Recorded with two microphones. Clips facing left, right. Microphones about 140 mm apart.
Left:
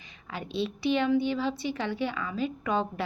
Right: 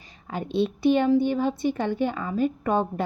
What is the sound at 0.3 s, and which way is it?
A woman's voice, 50° right (ahead or behind).